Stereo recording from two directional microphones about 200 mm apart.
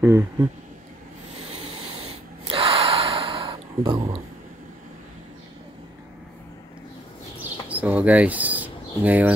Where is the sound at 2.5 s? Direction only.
30° right (ahead or behind).